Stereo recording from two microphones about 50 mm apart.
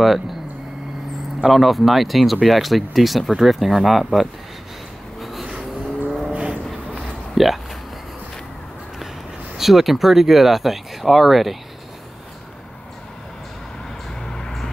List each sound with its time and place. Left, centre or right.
1.4 s speech: centre
5.2 s vehicle: centre
5.5 s vehicle: right
6.3 s a sound: right
7.3 s speech: centre
9.6 s speech: centre
14.2 s vehicle: centre